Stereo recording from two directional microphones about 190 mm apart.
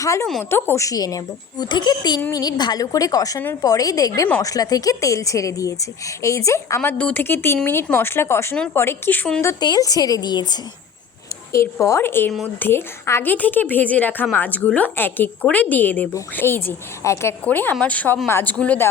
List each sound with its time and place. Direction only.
0.0 s a woman's voice: 15° left (ahead or behind)
12.3 s speech: centre (ahead or behind)
12.6 s a woman's voice: 15° left (ahead or behind)